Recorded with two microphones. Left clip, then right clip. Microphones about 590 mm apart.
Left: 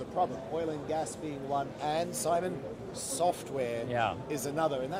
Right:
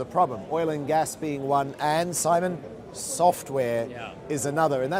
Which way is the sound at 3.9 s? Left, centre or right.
Left.